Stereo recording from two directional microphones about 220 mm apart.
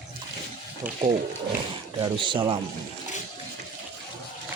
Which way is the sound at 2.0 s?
20° right (ahead or behind).